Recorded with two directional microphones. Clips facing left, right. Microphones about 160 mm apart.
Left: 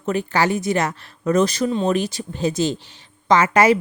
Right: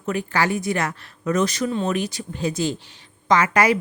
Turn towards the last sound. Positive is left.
turn(degrees=25)  # may be behind; listen again after turning